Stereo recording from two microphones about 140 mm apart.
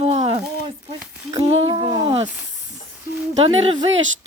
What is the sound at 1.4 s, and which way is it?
Speech, 40° right (ahead or behind).